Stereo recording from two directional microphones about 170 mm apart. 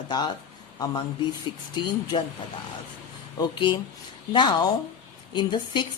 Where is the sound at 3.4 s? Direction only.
30° left (ahead or behind).